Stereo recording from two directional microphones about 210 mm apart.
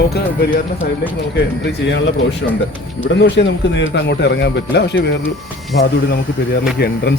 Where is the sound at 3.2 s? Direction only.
55° left (ahead or behind).